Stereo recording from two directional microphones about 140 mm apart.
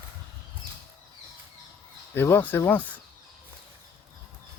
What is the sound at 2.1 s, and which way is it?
Speech, 15° left (ahead or behind).